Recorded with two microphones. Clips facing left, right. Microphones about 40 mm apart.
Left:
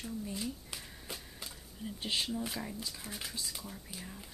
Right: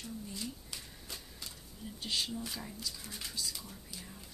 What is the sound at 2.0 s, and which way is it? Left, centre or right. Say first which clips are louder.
Speech: left 2 dB; left.